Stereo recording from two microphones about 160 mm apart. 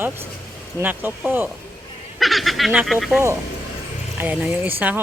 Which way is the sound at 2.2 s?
Centre (ahead or behind).